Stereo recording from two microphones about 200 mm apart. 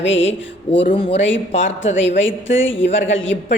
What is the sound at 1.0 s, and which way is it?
Speech, 35° left (ahead or behind).